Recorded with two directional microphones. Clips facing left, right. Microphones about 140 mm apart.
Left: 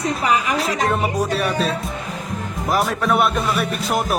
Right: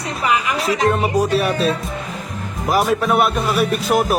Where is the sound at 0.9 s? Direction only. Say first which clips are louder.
Right 3 dB; centre (ahead or behind).